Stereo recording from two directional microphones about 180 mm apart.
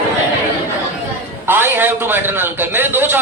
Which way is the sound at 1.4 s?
10° right (ahead or behind).